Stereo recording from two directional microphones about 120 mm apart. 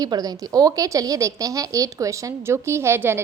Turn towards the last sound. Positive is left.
turn(degrees=-20)  # may be behind; listen again after turning